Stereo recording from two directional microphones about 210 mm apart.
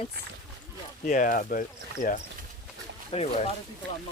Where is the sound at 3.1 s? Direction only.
30° left (ahead or behind).